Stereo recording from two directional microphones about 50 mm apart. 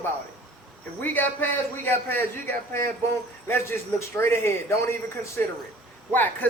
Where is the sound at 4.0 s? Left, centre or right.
Left.